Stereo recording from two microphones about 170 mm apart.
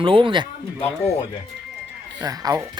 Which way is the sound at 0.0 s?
30° right (ahead or behind).